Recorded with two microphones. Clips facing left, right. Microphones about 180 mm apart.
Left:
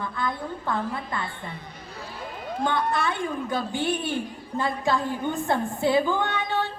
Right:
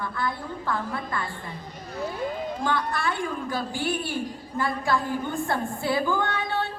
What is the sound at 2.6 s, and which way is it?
A woman's voice, 20° left (ahead or behind).